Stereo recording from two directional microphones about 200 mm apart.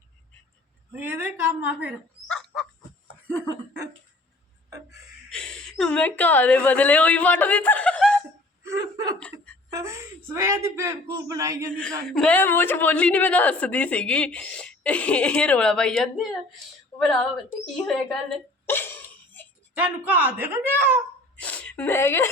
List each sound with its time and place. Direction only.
0.9 s a woman's voice: 10° right (ahead or behind)
2.3 s a sound: centre (ahead or behind)
5.3 s a woman's voice: 5° left (ahead or behind)
8.6 s hiccup: 15° right (ahead or behind)
9.1 s laughter: 5° left (ahead or behind)
9.7 s a man's voice: 15° right (ahead or behind)
11.7 s a man's voice: 5° left (ahead or behind)
16.9 s a sound: 5° left (ahead or behind)
19.7 s a woman's voice: 10° right (ahead or behind)
21.3 s whimper: 5° left (ahead or behind)